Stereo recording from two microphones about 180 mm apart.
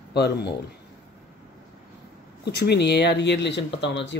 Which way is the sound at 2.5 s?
65° left (ahead or behind).